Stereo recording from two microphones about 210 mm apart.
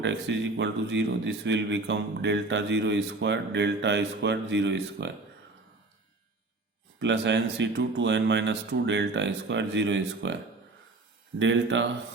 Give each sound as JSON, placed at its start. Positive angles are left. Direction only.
{"t": 0.0, "sound": "speech", "side_deg": -55}
{"t": 7.0, "sound": "speech", "side_deg": -60}
{"t": 11.3, "sound": "speech", "side_deg": -60}